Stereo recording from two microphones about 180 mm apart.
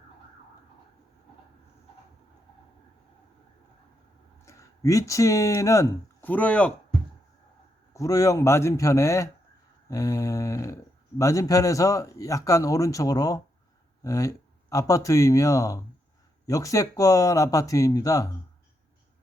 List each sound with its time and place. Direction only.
4.4 s speech: 15° left (ahead or behind)
7.9 s speech: 20° left (ahead or behind)